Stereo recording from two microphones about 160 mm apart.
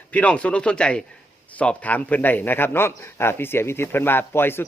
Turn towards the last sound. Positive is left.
turn(degrees=15)  # may be behind; listen again after turning